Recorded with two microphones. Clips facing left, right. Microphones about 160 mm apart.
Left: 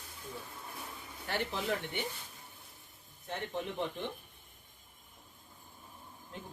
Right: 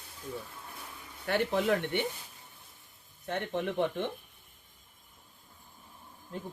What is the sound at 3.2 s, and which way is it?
Speech, 70° right (ahead or behind).